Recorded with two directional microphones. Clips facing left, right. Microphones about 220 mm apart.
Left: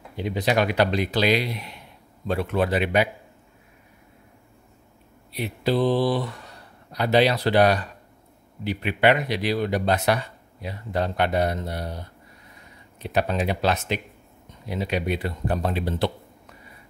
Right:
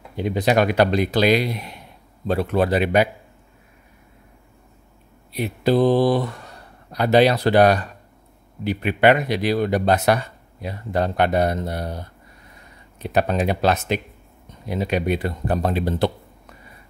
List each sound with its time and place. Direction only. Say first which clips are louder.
0.1 s a man's voice: right 4 dB; 45° right (ahead or behind)
5.3 s speech: right 5 dB; 45° right (ahead or behind)
13.0 s speech: right 4 dB; 45° right (ahead or behind)